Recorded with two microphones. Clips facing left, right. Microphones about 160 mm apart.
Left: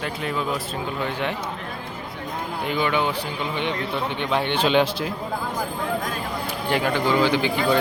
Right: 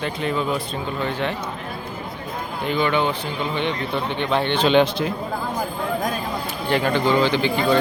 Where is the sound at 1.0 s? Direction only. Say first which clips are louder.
Right 2 dB; 15° left (ahead or behind).